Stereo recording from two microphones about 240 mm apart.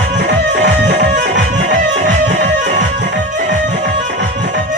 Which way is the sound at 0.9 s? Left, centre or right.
Right.